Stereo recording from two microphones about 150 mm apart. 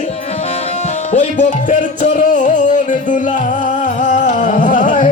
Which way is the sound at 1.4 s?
55° left (ahead or behind).